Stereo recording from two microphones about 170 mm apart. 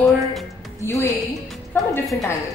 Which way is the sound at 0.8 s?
15° left (ahead or behind).